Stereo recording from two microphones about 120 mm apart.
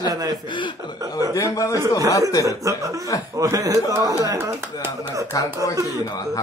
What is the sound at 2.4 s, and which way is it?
A man's voice, 25° right (ahead or behind).